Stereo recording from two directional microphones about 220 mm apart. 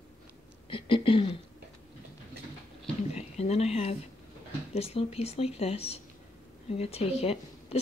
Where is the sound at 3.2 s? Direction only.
30° left (ahead or behind).